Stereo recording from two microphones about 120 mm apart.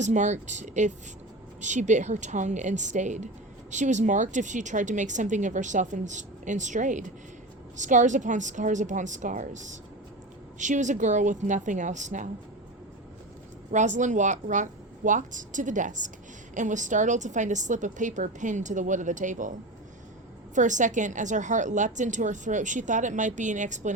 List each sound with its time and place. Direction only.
0.0 s speech: 85° right
13.7 s speech: 90° right
20.6 s speech: 90° right